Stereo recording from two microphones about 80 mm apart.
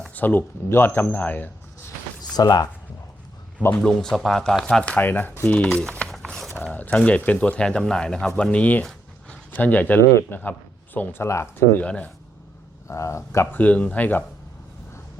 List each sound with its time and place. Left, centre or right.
0.1 s speech: left
2.3 s speech: left
3.7 s speech: centre
5.6 s speech: centre
6.1 s a sound: centre
6.7 s a sound: centre
7.2 s speech: left
8.8 s a sound: centre
9.5 s speech: left
10.0 s speech: left
12.9 s speech: left
13.5 s speech: centre